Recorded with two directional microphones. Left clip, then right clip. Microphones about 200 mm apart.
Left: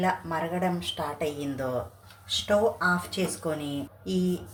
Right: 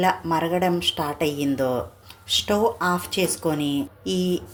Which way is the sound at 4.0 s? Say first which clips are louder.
Right 1 dB; 40° right (ahead or behind).